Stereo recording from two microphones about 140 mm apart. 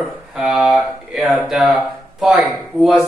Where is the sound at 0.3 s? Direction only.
Centre (ahead or behind).